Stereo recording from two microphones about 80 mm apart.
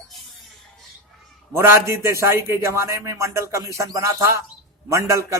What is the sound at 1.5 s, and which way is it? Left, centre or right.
A man's voice, right.